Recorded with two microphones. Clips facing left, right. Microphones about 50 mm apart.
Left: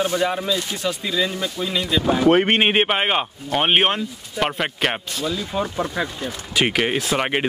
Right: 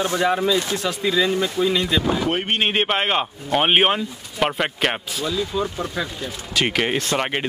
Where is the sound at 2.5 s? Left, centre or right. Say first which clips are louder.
Left 3 dB; left.